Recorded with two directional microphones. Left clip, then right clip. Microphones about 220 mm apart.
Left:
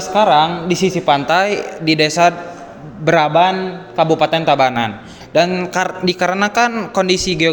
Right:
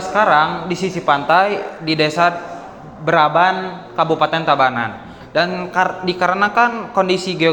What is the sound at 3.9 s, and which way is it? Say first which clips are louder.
A man's voice: left 2 dB; 45° left (ahead or behind).